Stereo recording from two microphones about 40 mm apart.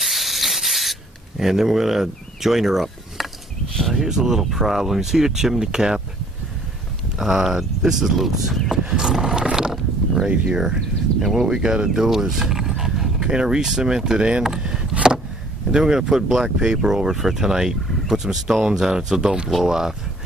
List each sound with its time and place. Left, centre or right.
0.0 s sanding: centre
1.4 s speech: centre
7.2 s speech: centre
8.6 s a sound: centre
10.5 s speech: centre
14.6 s vehicle: centre
15.7 s speech: centre